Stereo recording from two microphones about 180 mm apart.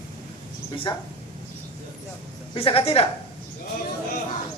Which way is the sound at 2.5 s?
30° left (ahead or behind).